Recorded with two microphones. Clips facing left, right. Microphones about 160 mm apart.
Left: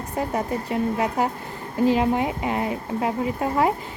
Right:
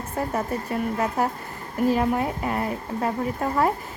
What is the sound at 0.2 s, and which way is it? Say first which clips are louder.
A woman's voice: left 1 dB; 15° left (ahead or behind).